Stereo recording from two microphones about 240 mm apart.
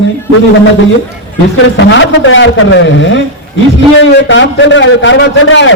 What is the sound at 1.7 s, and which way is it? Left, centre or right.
A man's voice, left.